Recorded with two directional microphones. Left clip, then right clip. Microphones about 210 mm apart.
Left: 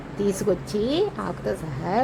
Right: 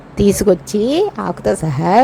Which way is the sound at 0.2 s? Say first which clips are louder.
Right 11 dB; 30° right (ahead or behind).